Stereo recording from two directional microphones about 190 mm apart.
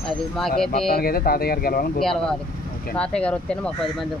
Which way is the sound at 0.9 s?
50° left (ahead or behind).